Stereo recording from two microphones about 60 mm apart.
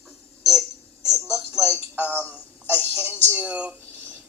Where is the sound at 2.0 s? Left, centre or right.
Left.